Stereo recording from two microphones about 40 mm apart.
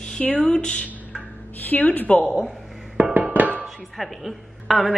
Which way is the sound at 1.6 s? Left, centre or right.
Left.